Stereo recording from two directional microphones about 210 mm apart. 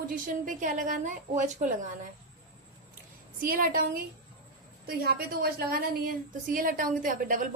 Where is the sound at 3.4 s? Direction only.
45° right (ahead or behind).